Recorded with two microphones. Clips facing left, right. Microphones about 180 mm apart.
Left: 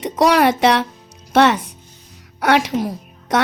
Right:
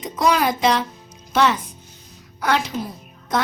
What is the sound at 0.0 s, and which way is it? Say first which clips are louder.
A woman's voice: left 5 dB; 70° left (ahead or behind).